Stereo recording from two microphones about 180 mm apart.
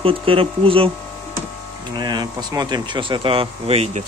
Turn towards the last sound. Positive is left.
turn(degrees=-35)  # may be behind; listen again after turning